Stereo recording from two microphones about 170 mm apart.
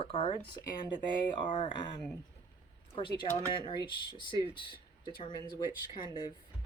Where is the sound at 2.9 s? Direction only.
30° left (ahead or behind).